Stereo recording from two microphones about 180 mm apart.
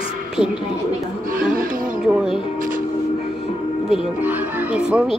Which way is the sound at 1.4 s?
50° right (ahead or behind).